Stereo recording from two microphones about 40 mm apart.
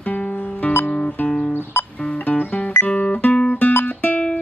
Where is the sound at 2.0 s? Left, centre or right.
Left.